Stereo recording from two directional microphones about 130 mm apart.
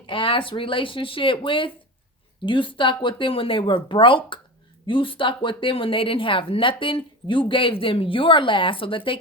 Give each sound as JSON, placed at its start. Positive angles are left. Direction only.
{"t": 0.0, "sound": "speech", "side_deg": 40}